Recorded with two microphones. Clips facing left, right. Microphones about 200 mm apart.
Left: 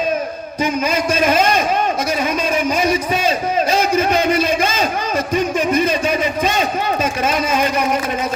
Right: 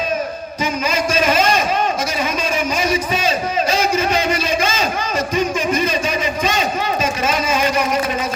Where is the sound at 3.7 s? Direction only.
55° left (ahead or behind).